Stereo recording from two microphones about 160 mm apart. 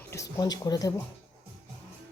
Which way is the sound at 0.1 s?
20° left (ahead or behind).